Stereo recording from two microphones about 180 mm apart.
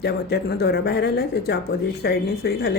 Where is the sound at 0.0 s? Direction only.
65° left (ahead or behind).